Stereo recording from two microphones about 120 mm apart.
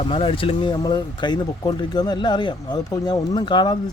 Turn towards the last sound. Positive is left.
turn(degrees=40)  # may be behind; listen again after turning